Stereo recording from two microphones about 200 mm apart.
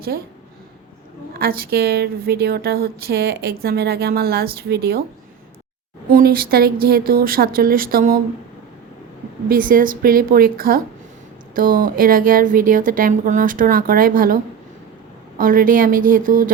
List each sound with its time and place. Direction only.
1.4 s a woman's voice: 50° right (ahead or behind)
6.1 s a woman's voice: 45° right (ahead or behind)
9.5 s a woman's voice: 45° right (ahead or behind)
15.4 s a woman's voice: 45° right (ahead or behind)